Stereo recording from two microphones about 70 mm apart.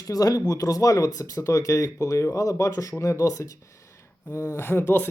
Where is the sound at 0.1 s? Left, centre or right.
Left.